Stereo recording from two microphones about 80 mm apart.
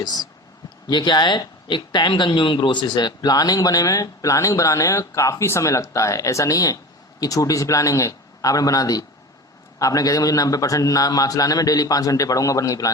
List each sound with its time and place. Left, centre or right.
0.0 s speech: left
0.9 s speech: left